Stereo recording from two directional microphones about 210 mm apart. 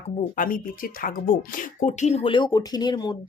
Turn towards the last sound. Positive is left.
turn(degrees=20)  # may be behind; listen again after turning